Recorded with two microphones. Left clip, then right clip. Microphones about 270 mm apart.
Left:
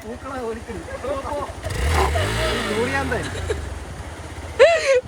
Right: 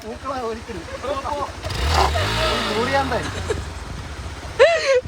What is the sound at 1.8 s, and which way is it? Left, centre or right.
Vehicle, centre.